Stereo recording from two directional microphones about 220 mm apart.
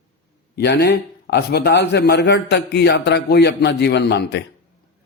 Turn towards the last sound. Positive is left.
turn(degrees=50)  # may be behind; listen again after turning